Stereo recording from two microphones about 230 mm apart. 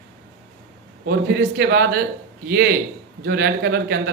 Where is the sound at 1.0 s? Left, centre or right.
Right.